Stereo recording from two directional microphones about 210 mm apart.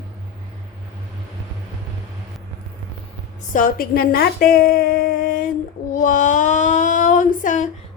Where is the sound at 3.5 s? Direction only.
40° left (ahead or behind).